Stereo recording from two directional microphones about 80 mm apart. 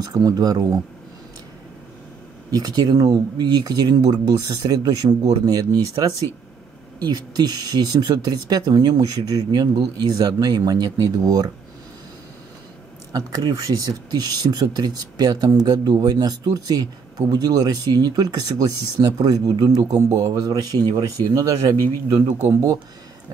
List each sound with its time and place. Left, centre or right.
0.1 s speech: right
2.5 s speech: right
13.1 s speech: right
20.0 s speech: right
22.5 s speech: right